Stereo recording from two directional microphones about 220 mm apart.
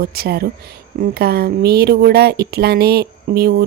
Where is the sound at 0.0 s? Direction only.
45° right (ahead or behind).